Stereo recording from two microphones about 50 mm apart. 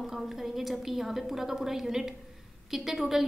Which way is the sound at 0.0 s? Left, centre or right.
Centre.